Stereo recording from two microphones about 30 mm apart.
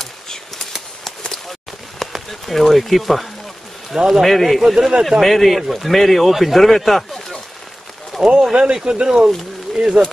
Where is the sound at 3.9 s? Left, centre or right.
Centre.